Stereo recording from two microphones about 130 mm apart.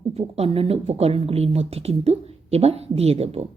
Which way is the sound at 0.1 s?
50° right (ahead or behind).